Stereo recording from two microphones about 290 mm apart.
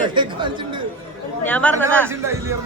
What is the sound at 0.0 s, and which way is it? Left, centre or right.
Speech, centre.